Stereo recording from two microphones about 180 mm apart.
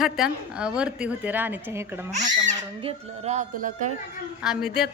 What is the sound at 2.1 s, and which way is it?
Speech, 40° right (ahead or behind).